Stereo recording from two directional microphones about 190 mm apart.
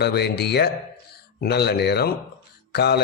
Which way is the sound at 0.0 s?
60° left (ahead or behind).